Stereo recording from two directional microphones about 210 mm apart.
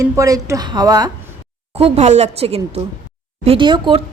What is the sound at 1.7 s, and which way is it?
Speech, 30° right (ahead or behind).